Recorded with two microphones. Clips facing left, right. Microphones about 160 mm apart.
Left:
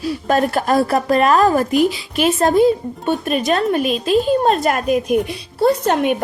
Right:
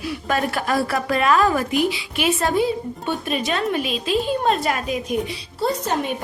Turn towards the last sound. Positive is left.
turn(degrees=65)  # may be behind; listen again after turning